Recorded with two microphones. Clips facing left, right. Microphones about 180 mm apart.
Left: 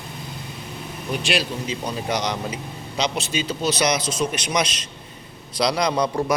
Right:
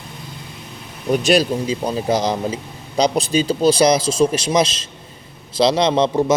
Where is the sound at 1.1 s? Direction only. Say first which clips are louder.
Right 9 dB; 40° right (ahead or behind).